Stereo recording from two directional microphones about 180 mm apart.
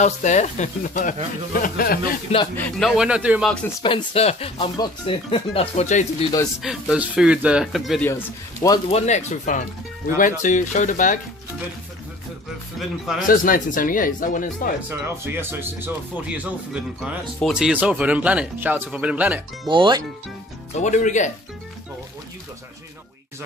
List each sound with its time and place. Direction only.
0.0 s speech: 40° left (ahead or behind)
2.5 s speech: 10° left (ahead or behind)
2.9 s speech: 5° right (ahead or behind)
3.8 s speech: 30° left (ahead or behind)
6.6 s speech: 5° right (ahead or behind)
8.0 s speech: 15° left (ahead or behind)
8.9 s speech: 40° left (ahead or behind)
12.7 s speech: centre (ahead or behind)
13.3 s speech: 50° left (ahead or behind)
14.9 s speech: 10° right (ahead or behind)
19.7 s speech: 25° right (ahead or behind)
20.7 s speech: 40° left (ahead or behind)